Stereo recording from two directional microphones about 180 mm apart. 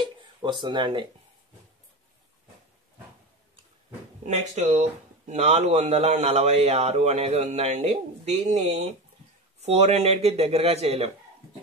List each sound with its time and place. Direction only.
0.4 s speech: 25° right (ahead or behind)
4.2 s a man's voice: 40° right (ahead or behind)